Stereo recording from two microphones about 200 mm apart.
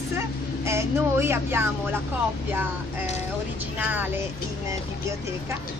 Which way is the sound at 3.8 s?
10° right (ahead or behind).